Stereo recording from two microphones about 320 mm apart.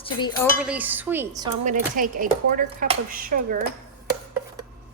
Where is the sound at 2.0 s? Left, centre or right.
Right.